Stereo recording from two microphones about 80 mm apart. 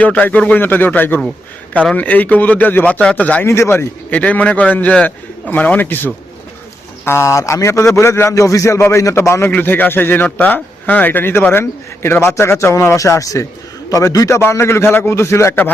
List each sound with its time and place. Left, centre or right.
0.0 s a man's voice: centre
3.4 s a man's voice: left
4.1 s a man's voice: centre; by 9.5 s left
9.5 s a man's voice: left